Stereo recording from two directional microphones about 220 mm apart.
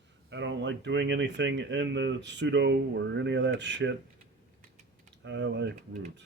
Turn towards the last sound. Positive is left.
turn(degrees=-55)  # may be behind; listen again after turning